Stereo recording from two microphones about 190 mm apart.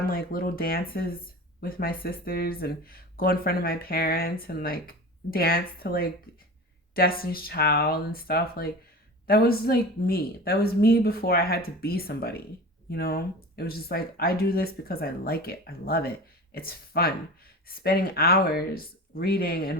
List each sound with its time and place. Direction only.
0.0 s speech: 50° left (ahead or behind)